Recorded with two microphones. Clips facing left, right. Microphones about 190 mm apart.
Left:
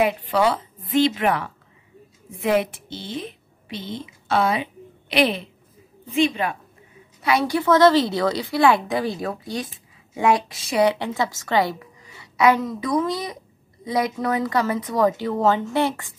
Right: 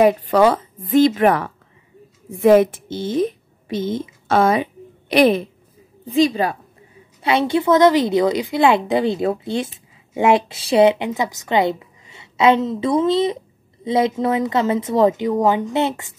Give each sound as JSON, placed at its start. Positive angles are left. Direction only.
{"t": 0.0, "sound": "a woman's voice", "side_deg": -45}
{"t": 6.1, "sound": "a woman's voice", "side_deg": -35}